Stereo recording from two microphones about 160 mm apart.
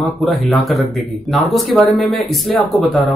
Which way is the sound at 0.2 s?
Centre (ahead or behind).